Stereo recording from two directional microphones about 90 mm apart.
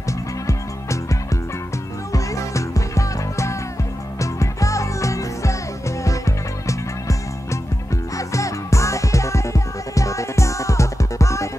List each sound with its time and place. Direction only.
0.5 s music: 35° left (ahead or behind)